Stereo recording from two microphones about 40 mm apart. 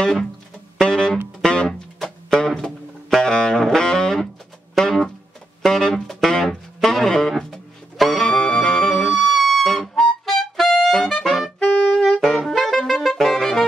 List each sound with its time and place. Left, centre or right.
0.0 s music: centre
11.7 s saxophone: left
12.1 s saxophone: centre
13.2 s music: centre